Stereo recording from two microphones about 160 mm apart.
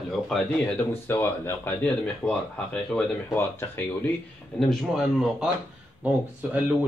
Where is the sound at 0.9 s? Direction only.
15° left (ahead or behind).